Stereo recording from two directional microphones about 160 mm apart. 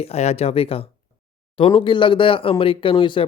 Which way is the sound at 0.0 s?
40° left (ahead or behind).